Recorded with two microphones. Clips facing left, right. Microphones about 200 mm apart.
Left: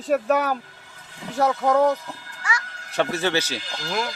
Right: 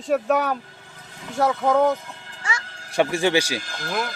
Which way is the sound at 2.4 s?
25° right (ahead or behind).